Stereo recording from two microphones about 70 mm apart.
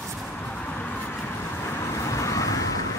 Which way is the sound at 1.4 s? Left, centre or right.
Left.